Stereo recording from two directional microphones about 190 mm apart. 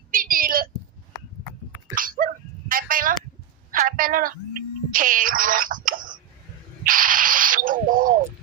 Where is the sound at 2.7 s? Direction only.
50° right (ahead or behind).